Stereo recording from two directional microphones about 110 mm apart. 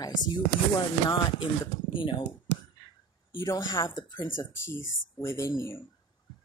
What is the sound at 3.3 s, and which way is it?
Speech, 35° left (ahead or behind).